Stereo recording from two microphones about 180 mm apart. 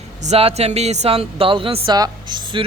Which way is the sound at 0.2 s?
35° right (ahead or behind).